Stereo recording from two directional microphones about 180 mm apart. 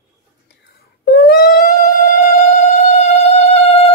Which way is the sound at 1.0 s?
55° left (ahead or behind).